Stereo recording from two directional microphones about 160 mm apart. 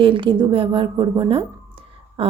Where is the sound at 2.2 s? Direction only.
35° right (ahead or behind).